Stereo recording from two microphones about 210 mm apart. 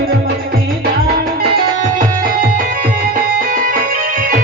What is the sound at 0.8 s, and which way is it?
Music, 45° right (ahead or behind).